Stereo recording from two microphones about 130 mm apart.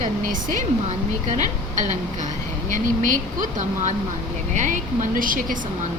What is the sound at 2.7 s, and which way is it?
A woman's voice, 85° right.